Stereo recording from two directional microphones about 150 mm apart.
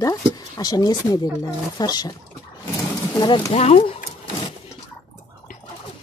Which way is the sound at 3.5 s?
45° left (ahead or behind).